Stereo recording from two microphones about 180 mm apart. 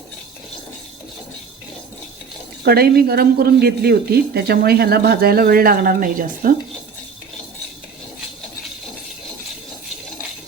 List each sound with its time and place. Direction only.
2.6 s a woman's voice: 60° right (ahead or behind)